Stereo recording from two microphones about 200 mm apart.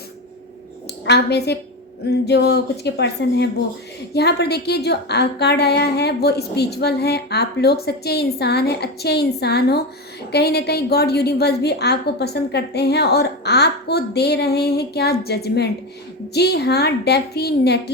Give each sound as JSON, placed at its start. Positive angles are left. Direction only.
{"t": 1.0, "sound": "a woman's voice", "side_deg": 55}